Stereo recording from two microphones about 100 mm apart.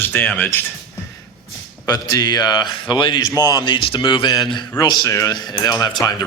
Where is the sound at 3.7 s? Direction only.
60° left (ahead or behind); by 5.3 s 35° left (ahead or behind).